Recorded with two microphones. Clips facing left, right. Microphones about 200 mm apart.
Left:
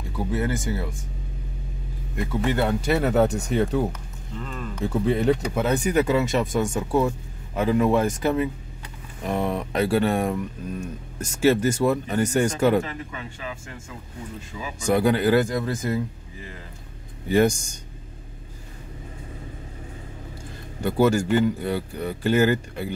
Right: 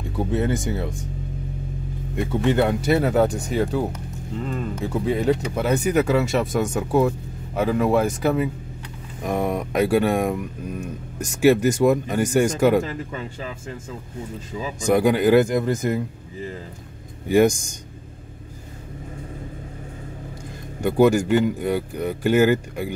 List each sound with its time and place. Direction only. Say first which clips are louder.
0.1 s speech: right 3 dB; 25° right (ahead or behind)
2.1 s speech: right 4 dB; 20° right (ahead or behind)
2.9 s speech: left 1 dB; centre (ahead or behind)
3.9 s speech: right 6 dB; 25° right (ahead or behind)
4.7 s speech: left 2 dB; 5° right (ahead or behind)
6.6 s speech: right 2 dB; 15° right (ahead or behind)
7.1 s speech: right 3 dB; 5° right (ahead or behind)
13.1 s speech: right 5 dB; 35° right (ahead or behind)
14.5 s speech: right 6 dB; 30° right (ahead or behind)
15.0 s speech: right 3 dB; 15° right (ahead or behind)
17.3 s speech: right 3 dB; 10° right (ahead or behind)
20.8 s speech: right 3 dB; 15° right (ahead or behind)